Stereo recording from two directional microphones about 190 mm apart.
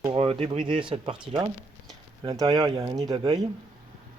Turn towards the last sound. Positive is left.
turn(degrees=-25)  # may be behind; listen again after turning